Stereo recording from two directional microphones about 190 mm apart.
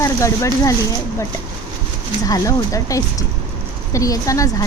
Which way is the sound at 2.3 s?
15° left (ahead or behind).